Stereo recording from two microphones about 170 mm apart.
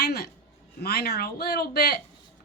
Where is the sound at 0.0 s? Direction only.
70° left (ahead or behind).